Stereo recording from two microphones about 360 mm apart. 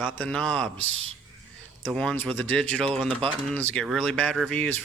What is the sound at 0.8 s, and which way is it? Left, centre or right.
Speech, right.